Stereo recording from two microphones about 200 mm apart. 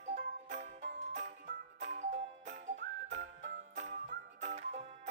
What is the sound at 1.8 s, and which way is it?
Music, 35° right (ahead or behind).